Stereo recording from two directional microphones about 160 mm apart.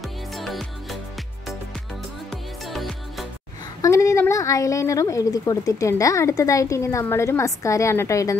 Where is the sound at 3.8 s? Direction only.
20° left (ahead or behind).